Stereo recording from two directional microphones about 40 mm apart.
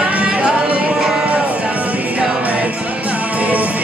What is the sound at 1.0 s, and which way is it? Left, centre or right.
Music, centre.